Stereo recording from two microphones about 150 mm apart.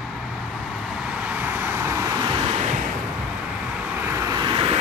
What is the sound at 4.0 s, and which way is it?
Vehicle, 15° right (ahead or behind).